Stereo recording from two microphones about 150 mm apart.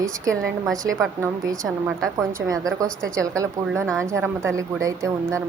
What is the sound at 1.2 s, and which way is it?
A woman's voice, 20° right (ahead or behind).